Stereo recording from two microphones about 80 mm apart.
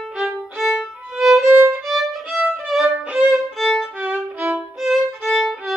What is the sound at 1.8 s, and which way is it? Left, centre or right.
Violin, centre.